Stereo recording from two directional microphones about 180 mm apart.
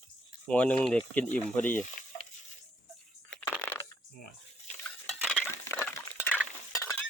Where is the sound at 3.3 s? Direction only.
10° left (ahead or behind).